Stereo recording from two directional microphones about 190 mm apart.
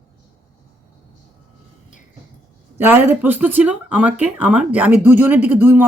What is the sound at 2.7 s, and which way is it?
Speech, 10° right (ahead or behind).